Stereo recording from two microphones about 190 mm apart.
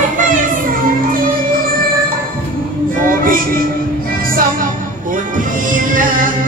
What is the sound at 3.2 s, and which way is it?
Music, 50° right (ahead or behind).